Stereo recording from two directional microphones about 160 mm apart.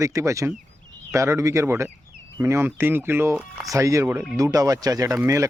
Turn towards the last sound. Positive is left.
turn(degrees=-20)  # may be behind; listen again after turning